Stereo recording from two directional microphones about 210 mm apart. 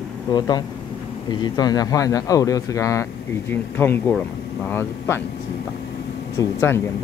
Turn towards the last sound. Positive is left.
turn(degrees=10)  # may be behind; listen again after turning